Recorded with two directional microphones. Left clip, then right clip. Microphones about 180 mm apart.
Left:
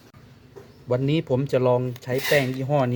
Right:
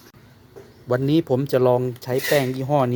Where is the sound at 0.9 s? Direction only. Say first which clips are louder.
Right 3 dB; 10° right (ahead or behind).